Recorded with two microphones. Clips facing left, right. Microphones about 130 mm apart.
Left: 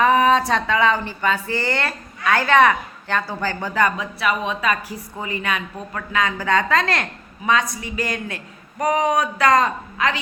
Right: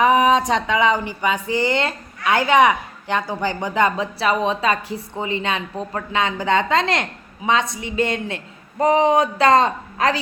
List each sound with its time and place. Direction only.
0.0 s speech: 15° right (ahead or behind)